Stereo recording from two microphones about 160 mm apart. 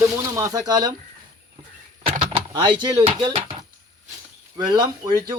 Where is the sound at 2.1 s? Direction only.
30° right (ahead or behind).